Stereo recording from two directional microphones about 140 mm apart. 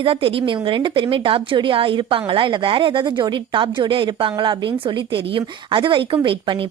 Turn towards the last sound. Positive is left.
turn(degrees=-35)  # may be behind; listen again after turning